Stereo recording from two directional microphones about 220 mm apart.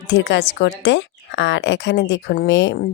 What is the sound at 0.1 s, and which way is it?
A woman's voice, 50° left (ahead or behind).